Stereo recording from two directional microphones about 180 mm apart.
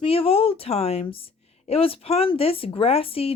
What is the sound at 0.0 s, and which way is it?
A woman's voice, 30° left (ahead or behind).